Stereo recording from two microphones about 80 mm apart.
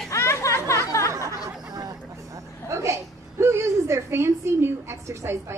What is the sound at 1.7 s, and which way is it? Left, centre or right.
Vehicle, right.